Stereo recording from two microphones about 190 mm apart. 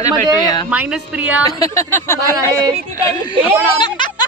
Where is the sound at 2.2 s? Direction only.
20° right (ahead or behind).